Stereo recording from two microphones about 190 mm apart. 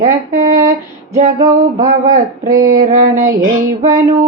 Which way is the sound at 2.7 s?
45° right (ahead or behind).